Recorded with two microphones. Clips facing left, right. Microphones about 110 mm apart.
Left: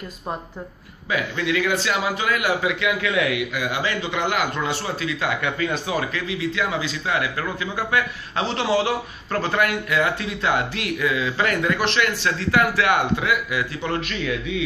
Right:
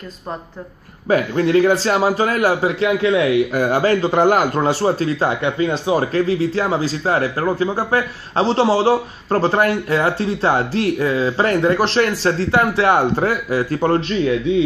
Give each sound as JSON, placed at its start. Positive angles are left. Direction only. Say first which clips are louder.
{"t": 1.0, "sound": "speech", "louder": "right 8 dB", "side_deg": -40}
{"t": 3.5, "sound": "speech", "louder": "right 9 dB", "side_deg": -45}
{"t": 13.9, "sound": "speech", "louder": "right 8 dB", "side_deg": -30}